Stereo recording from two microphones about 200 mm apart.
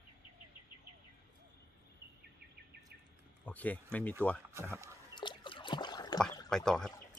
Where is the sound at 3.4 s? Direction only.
10° left (ahead or behind).